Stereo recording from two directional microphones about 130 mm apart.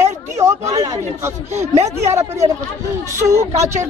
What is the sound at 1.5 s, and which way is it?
Speech, 60° right (ahead or behind).